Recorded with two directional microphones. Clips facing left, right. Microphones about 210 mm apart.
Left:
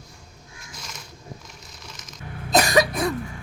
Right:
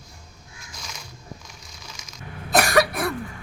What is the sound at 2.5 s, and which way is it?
Cough, 15° left (ahead or behind).